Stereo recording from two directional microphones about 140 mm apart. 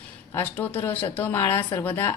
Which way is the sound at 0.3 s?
15° left (ahead or behind).